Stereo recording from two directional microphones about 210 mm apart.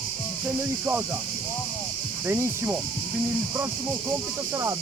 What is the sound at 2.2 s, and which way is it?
Speech, 10° right (ahead or behind).